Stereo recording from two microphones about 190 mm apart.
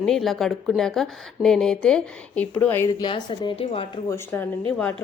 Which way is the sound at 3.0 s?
25° left (ahead or behind).